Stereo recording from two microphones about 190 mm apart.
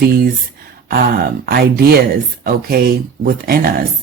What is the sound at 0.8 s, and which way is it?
Speech, 50° right (ahead or behind).